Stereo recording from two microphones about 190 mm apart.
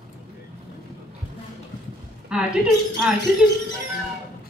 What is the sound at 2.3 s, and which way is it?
Speech, 5° right (ahead or behind).